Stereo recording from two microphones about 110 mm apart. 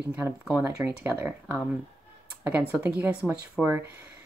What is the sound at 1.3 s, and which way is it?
Speech, 5° right (ahead or behind).